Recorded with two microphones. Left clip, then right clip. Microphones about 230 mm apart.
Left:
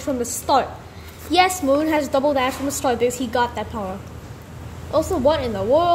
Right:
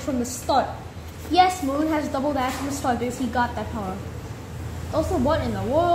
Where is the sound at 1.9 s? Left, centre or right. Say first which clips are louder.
Left 6 dB; left.